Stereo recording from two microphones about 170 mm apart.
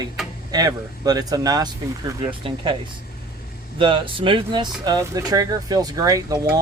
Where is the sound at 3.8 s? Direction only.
30° right (ahead or behind).